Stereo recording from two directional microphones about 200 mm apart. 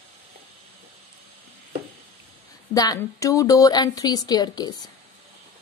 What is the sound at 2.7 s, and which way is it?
A woman's voice, 20° left (ahead or behind).